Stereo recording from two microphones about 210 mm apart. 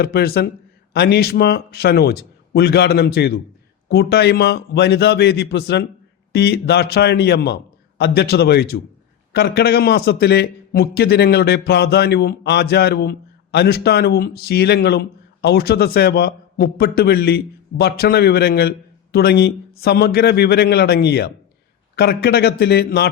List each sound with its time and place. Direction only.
0.0 s a man's voice: 45° left (ahead or behind)